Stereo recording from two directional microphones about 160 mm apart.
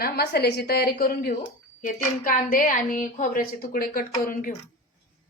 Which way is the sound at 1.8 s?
60° left (ahead or behind).